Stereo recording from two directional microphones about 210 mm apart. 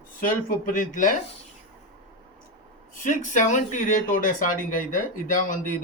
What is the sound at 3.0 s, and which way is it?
Speech, 40° left (ahead or behind).